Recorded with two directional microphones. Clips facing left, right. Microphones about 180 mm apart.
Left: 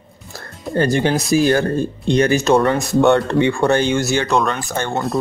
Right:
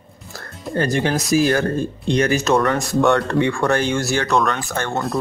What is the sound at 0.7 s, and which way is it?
Speech, 30° left (ahead or behind).